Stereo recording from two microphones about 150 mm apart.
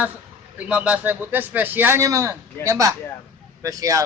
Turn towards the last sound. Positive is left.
turn(degrees=-20)  # may be behind; listen again after turning